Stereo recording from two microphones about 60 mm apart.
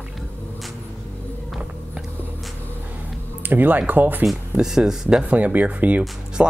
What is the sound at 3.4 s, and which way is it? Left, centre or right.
Speech, right.